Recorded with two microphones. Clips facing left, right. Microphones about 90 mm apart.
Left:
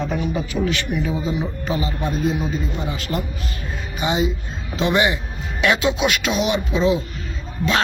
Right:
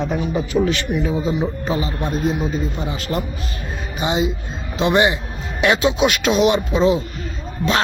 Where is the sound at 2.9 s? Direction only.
30° right (ahead or behind).